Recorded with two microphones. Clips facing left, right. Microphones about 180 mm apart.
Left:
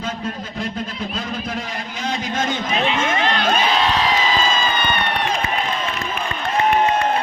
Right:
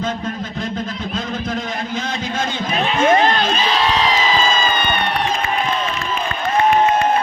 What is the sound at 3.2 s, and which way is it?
Crowd, 45° right (ahead or behind).